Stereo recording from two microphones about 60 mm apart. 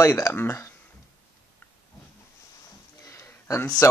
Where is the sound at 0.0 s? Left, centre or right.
Left.